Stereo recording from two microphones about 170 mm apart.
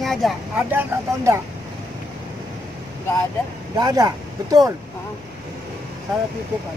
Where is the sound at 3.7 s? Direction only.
20° right (ahead or behind).